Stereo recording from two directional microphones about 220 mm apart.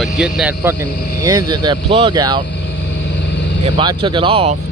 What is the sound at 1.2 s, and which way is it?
Speech, 15° right (ahead or behind).